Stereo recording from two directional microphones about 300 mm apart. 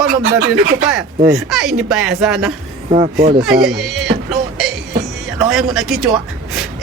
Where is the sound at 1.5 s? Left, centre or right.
Centre.